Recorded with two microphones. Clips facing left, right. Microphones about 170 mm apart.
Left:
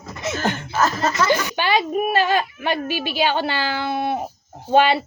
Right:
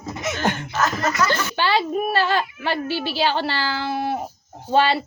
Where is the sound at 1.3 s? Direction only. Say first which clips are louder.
Left 2 dB; 15° left (ahead or behind).